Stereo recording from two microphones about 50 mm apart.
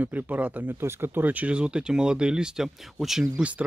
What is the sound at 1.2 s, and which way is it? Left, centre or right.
Speech, right.